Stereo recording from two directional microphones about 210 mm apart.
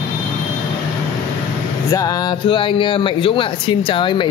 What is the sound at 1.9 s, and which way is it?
A woman's voice, 15° left (ahead or behind).